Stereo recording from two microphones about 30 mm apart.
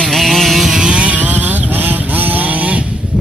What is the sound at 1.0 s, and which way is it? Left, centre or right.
Vehicle, right.